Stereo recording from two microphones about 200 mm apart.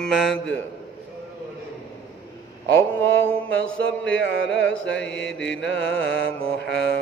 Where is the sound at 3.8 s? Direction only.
65° left (ahead or behind).